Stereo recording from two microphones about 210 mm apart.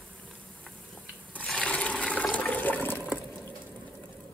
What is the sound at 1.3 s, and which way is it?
Toilet flush, 5° left (ahead or behind).